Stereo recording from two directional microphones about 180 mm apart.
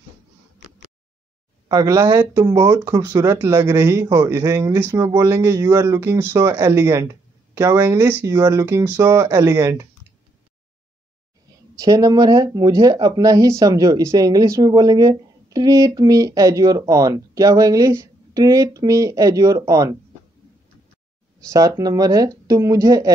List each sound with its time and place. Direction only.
1.7 s speech: 20° right (ahead or behind)
11.8 s speech: 20° right (ahead or behind)
21.5 s speech: 15° right (ahead or behind)